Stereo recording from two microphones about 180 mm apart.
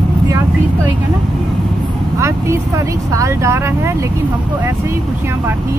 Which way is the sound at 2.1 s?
15° right (ahead or behind).